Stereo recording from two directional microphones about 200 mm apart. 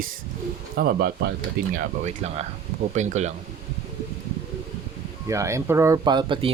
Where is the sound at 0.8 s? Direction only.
50° right (ahead or behind).